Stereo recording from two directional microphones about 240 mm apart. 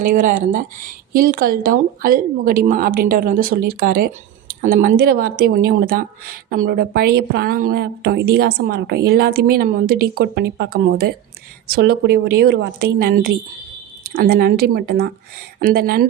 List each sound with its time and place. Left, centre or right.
0.0 s speech: right